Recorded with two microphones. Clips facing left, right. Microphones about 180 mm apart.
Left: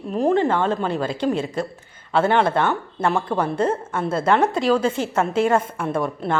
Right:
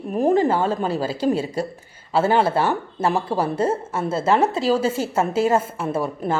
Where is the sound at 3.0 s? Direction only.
35° right (ahead or behind).